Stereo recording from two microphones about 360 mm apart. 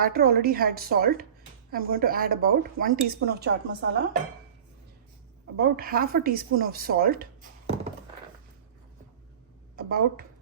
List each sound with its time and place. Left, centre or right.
0.0 s a woman's voice: right
5.5 s a woman's voice: right
9.7 s speech: right